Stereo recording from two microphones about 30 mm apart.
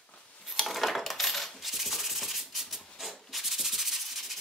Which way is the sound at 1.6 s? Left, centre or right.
Centre.